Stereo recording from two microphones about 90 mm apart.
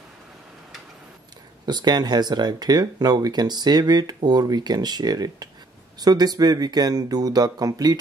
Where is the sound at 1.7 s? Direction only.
50° right (ahead or behind).